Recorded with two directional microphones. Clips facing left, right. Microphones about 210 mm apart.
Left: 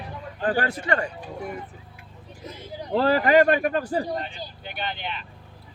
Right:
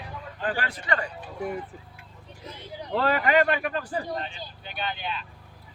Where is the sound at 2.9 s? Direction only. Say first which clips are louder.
Left 4 dB; 30° left (ahead or behind).